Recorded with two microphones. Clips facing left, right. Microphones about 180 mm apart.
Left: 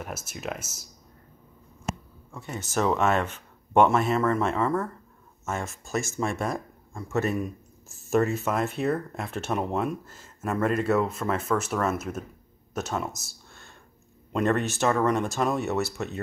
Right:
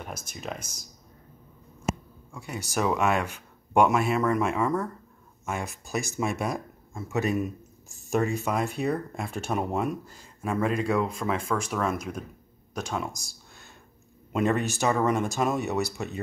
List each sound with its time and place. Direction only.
0.0 s speech: 5° left (ahead or behind)
1.9 s a sound: 5° right (ahead or behind)
2.6 s speech: 10° right (ahead or behind)
6.5 s speech: centre (ahead or behind)